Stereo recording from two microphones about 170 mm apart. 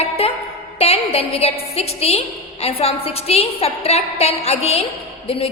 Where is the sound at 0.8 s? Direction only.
35° left (ahead or behind).